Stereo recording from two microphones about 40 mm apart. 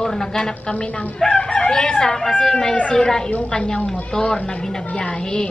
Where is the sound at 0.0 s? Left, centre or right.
Centre.